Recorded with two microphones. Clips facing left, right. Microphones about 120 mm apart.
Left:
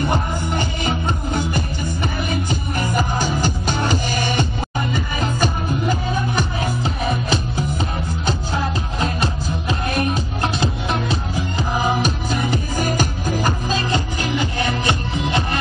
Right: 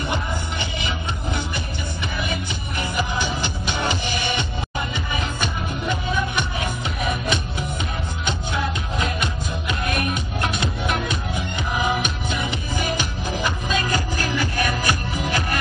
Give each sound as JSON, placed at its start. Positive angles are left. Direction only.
{"t": 0.1, "sound": "music", "side_deg": 40}
{"t": 2.8, "sound": "music", "side_deg": 40}